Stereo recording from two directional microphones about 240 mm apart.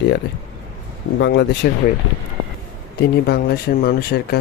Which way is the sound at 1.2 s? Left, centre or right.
Left.